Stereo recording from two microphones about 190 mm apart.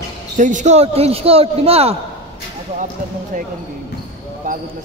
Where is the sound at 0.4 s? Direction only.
40° right (ahead or behind).